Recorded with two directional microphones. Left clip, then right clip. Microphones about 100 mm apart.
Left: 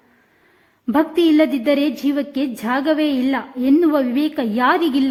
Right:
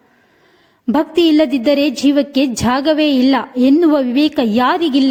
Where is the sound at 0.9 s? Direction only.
30° right (ahead or behind).